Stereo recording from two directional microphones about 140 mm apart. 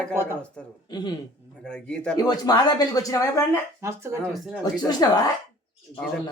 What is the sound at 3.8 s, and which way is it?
Speech, 20° right (ahead or behind).